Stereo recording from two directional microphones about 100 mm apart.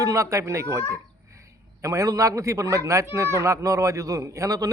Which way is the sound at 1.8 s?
35° right (ahead or behind).